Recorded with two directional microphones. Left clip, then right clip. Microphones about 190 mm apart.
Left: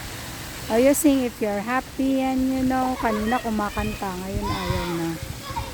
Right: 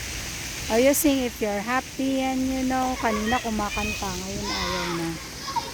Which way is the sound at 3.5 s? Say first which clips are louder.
Even; 20° left (ahead or behind).